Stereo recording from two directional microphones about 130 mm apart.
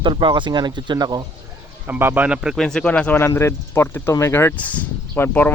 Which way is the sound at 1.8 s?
15° right (ahead or behind).